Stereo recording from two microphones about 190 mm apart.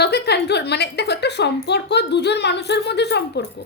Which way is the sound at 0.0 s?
60° left (ahead or behind).